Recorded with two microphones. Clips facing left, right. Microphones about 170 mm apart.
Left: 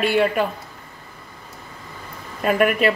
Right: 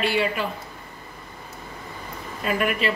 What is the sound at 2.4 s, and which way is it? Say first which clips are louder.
Speech: left 6 dB; 50° left (ahead or behind).